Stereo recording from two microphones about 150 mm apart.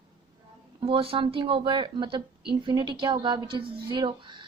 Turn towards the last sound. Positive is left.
turn(degrees=-30)  # may be behind; listen again after turning